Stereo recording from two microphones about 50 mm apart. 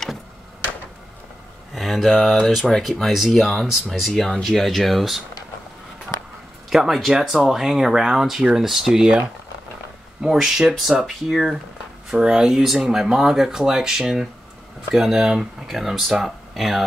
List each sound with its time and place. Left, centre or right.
1.7 s speech: centre
6.7 s speech: centre
10.2 s speech: centre